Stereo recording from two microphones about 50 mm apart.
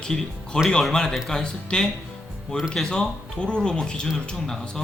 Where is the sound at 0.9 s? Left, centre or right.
Centre.